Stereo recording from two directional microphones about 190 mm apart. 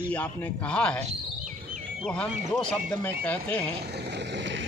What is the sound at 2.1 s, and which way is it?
Speech, 5° left (ahead or behind).